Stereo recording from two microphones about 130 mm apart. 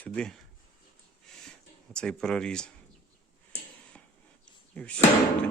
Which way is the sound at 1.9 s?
5° left (ahead or behind).